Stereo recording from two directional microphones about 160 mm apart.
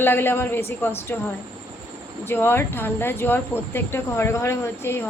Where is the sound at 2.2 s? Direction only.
15° left (ahead or behind).